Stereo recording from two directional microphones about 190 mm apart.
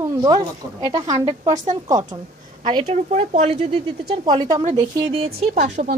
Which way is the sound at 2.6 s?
30° right (ahead or behind).